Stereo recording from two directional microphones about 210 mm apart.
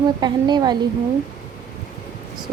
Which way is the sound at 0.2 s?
20° right (ahead or behind).